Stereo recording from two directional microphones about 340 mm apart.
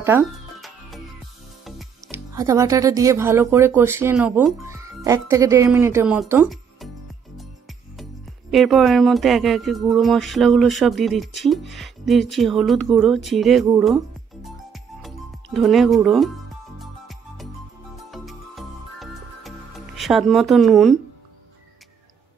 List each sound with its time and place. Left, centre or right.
0.0 s music: centre
1.6 s speech: centre
7.3 s music: centre